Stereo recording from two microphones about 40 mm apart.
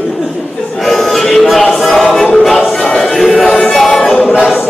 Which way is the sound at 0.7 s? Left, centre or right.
Centre.